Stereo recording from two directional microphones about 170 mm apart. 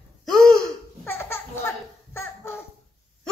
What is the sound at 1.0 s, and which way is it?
Laughter, 15° left (ahead or behind).